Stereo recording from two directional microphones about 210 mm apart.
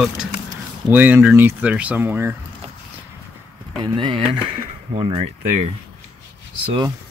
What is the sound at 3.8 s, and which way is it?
Speech, 20° right (ahead or behind).